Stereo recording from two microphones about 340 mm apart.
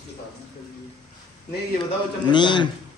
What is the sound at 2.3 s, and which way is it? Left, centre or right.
Speech, centre.